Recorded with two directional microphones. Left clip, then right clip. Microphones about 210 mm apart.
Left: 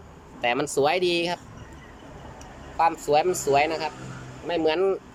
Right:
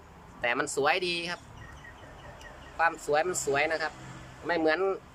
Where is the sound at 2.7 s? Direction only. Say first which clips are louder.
Left 5 dB; 15° left (ahead or behind).